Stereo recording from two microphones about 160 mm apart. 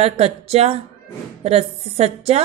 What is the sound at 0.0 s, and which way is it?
Speech, 40° right (ahead or behind).